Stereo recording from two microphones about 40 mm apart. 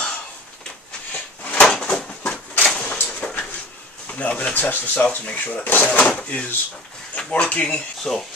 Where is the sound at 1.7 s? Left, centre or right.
Centre.